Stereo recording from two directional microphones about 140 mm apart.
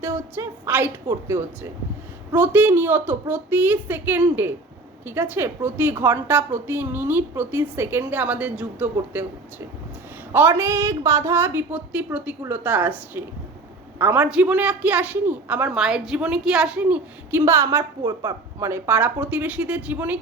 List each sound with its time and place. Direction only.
0.0 s a woman's voice: 20° right (ahead or behind)